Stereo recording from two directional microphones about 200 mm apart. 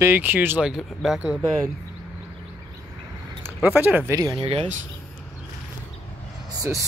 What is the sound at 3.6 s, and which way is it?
Speech, 10° right (ahead or behind).